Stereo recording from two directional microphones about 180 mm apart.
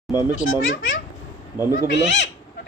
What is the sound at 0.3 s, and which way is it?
Speech, 90° left.